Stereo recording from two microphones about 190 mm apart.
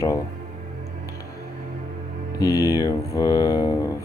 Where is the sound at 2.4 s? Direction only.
20° left (ahead or behind).